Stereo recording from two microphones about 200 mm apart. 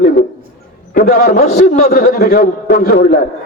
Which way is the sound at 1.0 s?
40° left (ahead or behind).